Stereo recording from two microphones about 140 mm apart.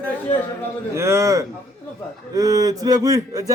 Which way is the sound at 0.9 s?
20° right (ahead or behind).